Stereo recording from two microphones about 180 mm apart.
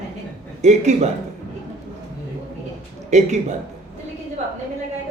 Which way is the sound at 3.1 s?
40° right (ahead or behind).